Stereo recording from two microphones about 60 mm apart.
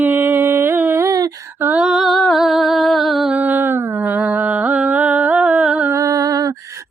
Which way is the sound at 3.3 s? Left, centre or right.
Right.